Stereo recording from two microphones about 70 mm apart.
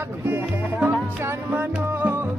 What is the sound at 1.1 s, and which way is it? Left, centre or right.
Music, right.